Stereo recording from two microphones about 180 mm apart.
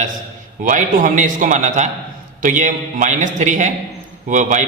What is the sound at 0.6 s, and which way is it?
A man's voice, 45° right (ahead or behind).